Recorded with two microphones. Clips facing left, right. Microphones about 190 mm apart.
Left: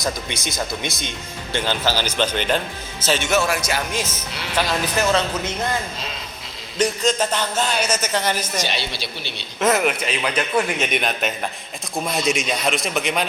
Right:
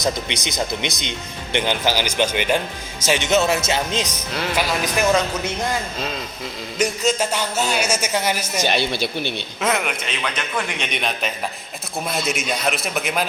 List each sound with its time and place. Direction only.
0.0 s a man's voice: 20° right (ahead or behind)
6.7 s a man's voice: 10° right (ahead or behind)
8.6 s a woman's voice: 50° right (ahead or behind)
9.6 s a man's voice: centre (ahead or behind)